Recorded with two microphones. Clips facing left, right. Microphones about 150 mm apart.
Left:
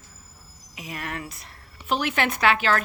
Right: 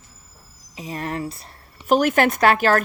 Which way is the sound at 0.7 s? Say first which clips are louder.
Right 6 dB; 30° right (ahead or behind).